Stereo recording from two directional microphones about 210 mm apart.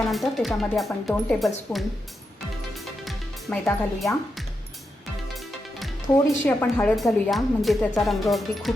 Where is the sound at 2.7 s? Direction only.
Centre (ahead or behind).